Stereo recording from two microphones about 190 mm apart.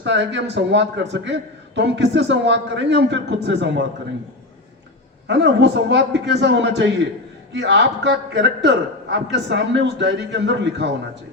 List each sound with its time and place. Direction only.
0.0 s a man's voice: 70° right (ahead or behind)
5.3 s a man's voice: 65° right (ahead or behind)